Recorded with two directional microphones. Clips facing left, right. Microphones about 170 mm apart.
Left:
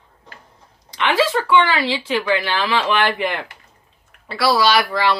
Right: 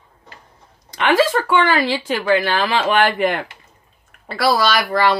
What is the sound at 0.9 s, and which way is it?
A woman's voice, 50° right (ahead or behind).